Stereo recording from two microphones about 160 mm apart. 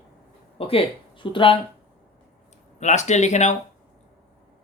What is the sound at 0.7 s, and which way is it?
Speech, 35° left (ahead or behind).